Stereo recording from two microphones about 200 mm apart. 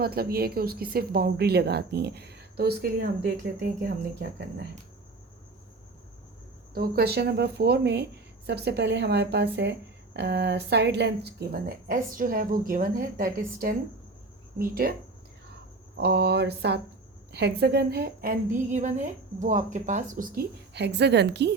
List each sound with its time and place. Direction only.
0.0 s a woman's voice: 50° right (ahead or behind)
6.7 s a woman's voice: 50° right (ahead or behind)
16.0 s a woman's voice: 55° right (ahead or behind)